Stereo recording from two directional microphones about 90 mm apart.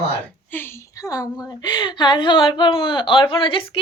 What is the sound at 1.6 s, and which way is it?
Speech, 50° left (ahead or behind).